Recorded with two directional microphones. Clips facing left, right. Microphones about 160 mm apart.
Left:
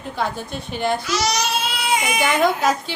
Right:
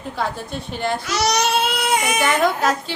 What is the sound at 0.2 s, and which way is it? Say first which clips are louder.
Speech: even; centre (ahead or behind).